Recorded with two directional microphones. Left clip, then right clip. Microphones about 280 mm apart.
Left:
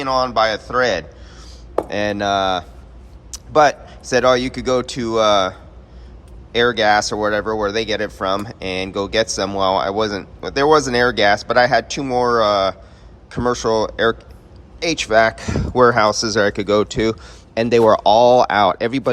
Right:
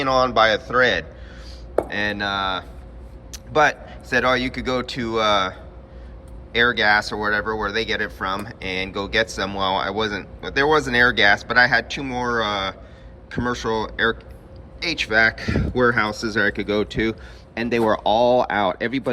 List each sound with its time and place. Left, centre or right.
0.0 s speech: centre; by 19.0 s left